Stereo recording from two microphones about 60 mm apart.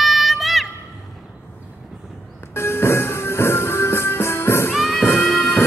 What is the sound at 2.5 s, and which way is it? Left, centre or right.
Music, left.